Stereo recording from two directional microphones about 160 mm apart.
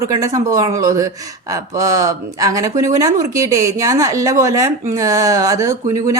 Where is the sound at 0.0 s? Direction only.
20° right (ahead or behind).